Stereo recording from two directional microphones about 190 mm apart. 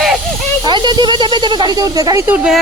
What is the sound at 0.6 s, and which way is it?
Speech, 25° right (ahead or behind).